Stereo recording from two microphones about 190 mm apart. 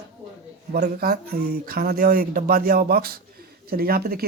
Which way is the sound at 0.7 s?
50° right (ahead or behind).